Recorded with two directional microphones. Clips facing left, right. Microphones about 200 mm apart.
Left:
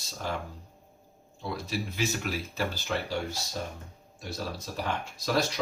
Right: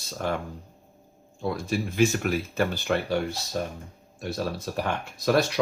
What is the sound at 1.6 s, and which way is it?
Speech, 50° right (ahead or behind).